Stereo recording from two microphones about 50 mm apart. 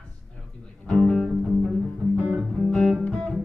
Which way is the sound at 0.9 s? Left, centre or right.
Centre.